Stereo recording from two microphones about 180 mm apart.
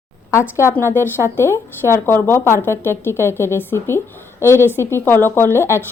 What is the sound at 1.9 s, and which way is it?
Speech, 15° left (ahead or behind).